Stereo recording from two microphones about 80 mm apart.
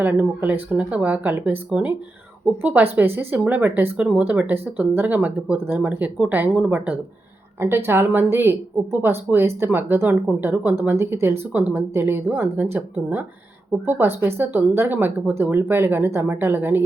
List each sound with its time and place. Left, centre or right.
0.0 s speech: right
2.6 s speech: right
7.6 s speech: right